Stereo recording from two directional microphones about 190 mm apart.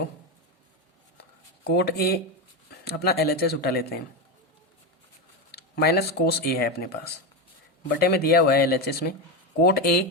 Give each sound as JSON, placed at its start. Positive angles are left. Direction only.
{"t": 1.7, "sound": "speech", "side_deg": 55}
{"t": 5.5, "sound": "speech", "side_deg": 55}